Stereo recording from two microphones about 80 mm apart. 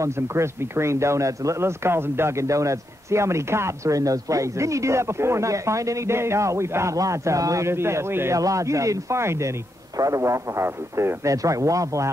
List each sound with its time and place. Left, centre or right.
0.0 s speech: right
8.4 s speech: right
11.2 s speech: right